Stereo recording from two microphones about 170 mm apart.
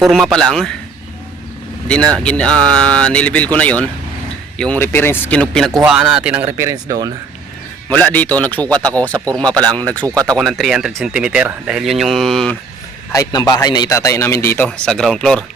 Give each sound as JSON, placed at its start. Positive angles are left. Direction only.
{"t": 0.0, "sound": "speech", "side_deg": 0}
{"t": 2.1, "sound": "a man's voice", "side_deg": 5}
{"t": 6.4, "sound": "speech", "side_deg": -15}
{"t": 7.9, "sound": "a man's voice", "side_deg": 10}
{"t": 13.1, "sound": "a man's voice", "side_deg": 20}